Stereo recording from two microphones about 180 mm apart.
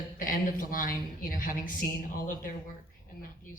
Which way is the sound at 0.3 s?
50° left (ahead or behind).